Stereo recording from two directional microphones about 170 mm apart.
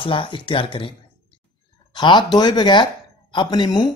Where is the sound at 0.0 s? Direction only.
30° left (ahead or behind).